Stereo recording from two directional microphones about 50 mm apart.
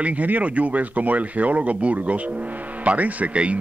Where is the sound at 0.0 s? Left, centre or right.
Right.